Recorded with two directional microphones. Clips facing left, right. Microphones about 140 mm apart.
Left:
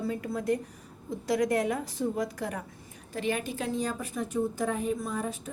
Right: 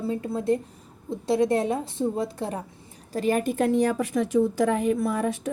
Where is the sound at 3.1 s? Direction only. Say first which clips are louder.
Right 8 dB; 40° right (ahead or behind).